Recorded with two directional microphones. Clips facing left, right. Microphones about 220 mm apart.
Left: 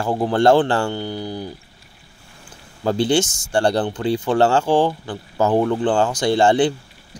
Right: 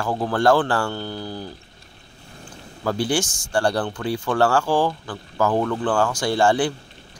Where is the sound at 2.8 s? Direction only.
25° left (ahead or behind).